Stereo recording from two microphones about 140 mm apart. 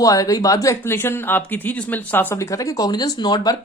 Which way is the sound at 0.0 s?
25° left (ahead or behind).